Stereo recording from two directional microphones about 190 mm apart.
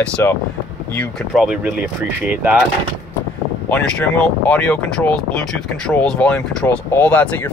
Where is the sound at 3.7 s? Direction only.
10° left (ahead or behind).